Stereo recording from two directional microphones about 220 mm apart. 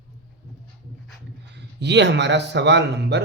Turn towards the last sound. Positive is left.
turn(degrees=-50)  # may be behind; listen again after turning